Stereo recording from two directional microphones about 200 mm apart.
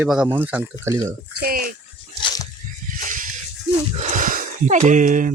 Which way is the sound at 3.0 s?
40° right (ahead or behind).